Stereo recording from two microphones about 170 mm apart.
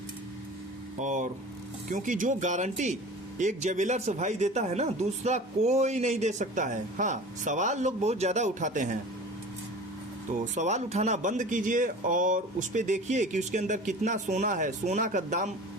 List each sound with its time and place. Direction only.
0.9 s speech: 45° right (ahead or behind)
10.3 s speech: 45° right (ahead or behind)